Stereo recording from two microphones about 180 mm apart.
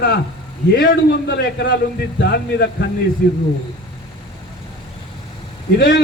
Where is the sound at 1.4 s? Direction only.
65° left (ahead or behind).